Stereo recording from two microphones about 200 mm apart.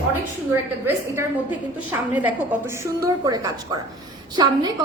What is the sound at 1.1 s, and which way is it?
A woman's voice, 10° right (ahead or behind).